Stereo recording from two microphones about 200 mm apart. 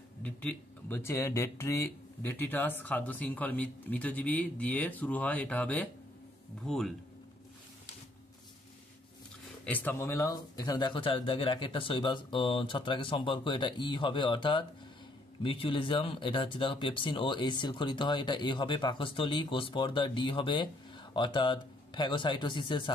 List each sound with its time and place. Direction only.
0.2 s speech: 5° left (ahead or behind)
9.7 s speech: 10° left (ahead or behind); by 22.9 s 25° left (ahead or behind)